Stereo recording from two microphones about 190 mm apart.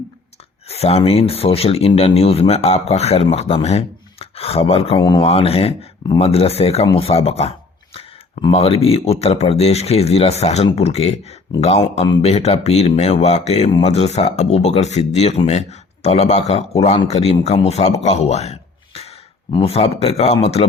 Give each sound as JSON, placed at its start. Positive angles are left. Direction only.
{"t": 0.7, "sound": "speech", "side_deg": 35}